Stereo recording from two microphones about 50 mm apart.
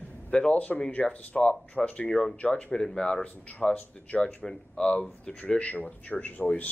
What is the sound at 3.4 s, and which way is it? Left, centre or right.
Speech, left.